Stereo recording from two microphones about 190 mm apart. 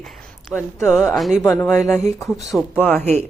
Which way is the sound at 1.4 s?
10° left (ahead or behind).